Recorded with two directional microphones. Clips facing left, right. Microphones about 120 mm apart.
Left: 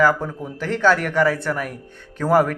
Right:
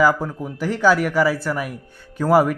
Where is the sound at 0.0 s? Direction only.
10° right (ahead or behind).